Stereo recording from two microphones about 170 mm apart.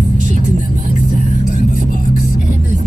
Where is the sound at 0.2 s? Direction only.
45° right (ahead or behind).